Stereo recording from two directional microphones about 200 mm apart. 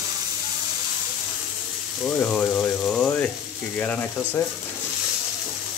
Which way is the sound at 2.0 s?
5° left (ahead or behind).